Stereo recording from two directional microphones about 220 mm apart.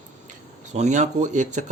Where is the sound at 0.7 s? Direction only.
30° right (ahead or behind).